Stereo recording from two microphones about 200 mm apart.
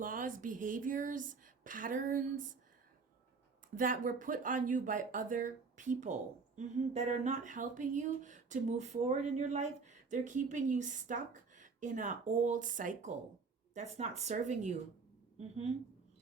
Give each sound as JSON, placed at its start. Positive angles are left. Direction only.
{"t": 0.0, "sound": "a woman's voice", "side_deg": -40}
{"t": 3.8, "sound": "a woman's voice", "side_deg": -40}